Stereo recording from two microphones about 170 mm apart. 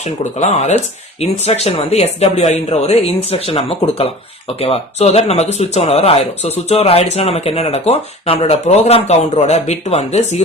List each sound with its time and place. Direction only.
0.0 s speech: 40° left (ahead or behind)